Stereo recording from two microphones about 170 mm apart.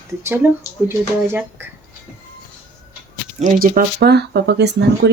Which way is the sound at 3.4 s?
55° right (ahead or behind).